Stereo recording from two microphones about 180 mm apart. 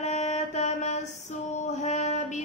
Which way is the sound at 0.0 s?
40° left (ahead or behind).